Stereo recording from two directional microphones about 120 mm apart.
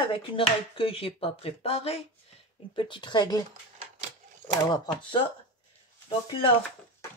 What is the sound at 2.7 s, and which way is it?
Speech, 45° left (ahead or behind).